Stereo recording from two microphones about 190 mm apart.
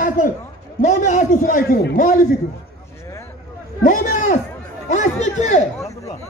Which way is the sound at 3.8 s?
45° left (ahead or behind).